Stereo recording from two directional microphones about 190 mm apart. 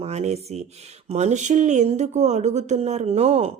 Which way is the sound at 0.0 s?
35° right (ahead or behind).